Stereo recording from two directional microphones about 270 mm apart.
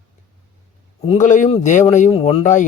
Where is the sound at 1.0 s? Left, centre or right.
Left.